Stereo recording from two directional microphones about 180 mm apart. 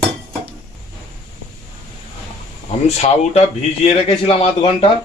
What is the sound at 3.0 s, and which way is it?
Speech, 35° left (ahead or behind).